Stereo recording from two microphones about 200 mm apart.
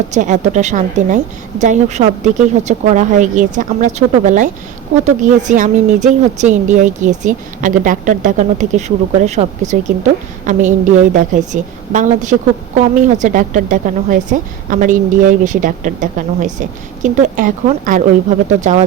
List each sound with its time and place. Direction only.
0.1 s a woman's voice: 35° right (ahead or behind)
5.5 s a woman's voice: 35° right (ahead or behind)